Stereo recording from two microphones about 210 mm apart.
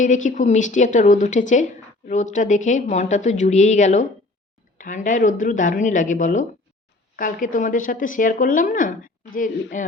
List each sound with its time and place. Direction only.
0.0 s a woman's voice: 35° left (ahead or behind)